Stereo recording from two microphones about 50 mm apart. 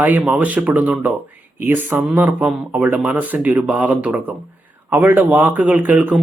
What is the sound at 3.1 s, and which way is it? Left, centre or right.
Speech, right.